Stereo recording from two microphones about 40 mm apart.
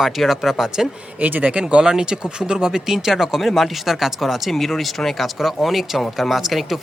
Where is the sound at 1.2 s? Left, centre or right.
Right.